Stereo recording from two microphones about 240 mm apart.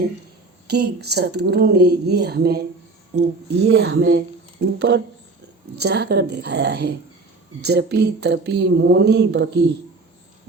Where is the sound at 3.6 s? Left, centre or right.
Right.